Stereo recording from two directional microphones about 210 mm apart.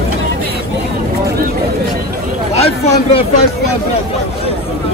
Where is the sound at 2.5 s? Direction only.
30° left (ahead or behind).